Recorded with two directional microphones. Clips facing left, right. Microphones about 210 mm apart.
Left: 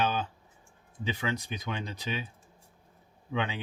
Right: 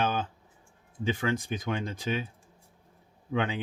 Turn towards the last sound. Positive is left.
turn(degrees=-50)  # may be behind; listen again after turning